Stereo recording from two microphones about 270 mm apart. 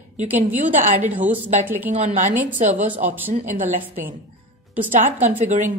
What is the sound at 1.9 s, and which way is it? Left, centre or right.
A woman's voice, right.